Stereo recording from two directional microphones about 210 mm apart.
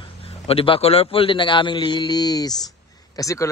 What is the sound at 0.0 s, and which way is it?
A man's voice, 25° left (ahead or behind).